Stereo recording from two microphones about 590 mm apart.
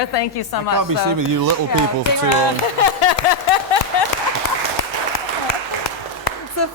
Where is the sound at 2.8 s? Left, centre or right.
Left.